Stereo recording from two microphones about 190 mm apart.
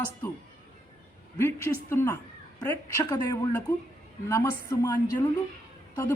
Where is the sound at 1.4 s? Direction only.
15° left (ahead or behind).